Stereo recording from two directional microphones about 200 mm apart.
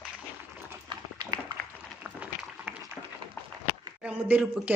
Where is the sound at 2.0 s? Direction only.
5° right (ahead or behind).